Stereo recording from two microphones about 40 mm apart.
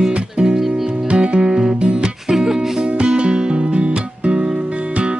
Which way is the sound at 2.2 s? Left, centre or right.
Centre.